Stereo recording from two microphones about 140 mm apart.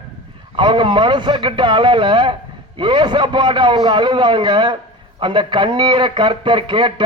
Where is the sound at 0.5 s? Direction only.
35° right (ahead or behind).